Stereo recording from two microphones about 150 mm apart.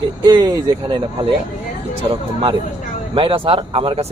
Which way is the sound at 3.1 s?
35° right (ahead or behind).